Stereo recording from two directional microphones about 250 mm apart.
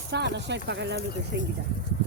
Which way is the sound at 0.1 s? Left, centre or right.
Right.